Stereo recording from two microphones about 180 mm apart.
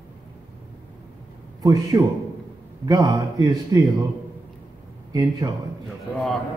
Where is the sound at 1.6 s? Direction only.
20° right (ahead or behind).